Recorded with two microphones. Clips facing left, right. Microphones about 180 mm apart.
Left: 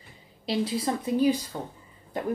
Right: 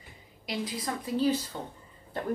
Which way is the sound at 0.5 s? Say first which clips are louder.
Left 7 dB; 30° left (ahead or behind).